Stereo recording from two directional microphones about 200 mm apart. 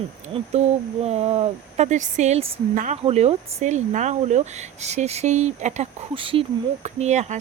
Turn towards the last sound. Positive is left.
turn(degrees=-35)  # may be behind; listen again after turning